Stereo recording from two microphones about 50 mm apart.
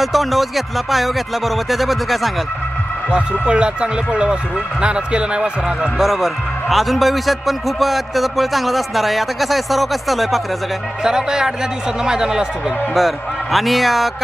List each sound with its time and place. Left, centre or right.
0.0 s a man's voice: centre
3.1 s speech: right
5.9 s a man's voice: centre
11.1 s speech: centre
12.9 s a man's voice: centre